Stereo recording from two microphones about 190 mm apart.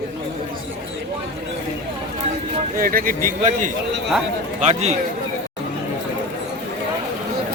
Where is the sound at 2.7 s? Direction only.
50° right (ahead or behind).